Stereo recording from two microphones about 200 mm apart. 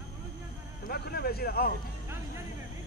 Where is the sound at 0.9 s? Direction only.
50° left (ahead or behind).